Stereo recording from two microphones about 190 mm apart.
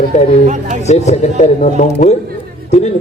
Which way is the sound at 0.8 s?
35° left (ahead or behind).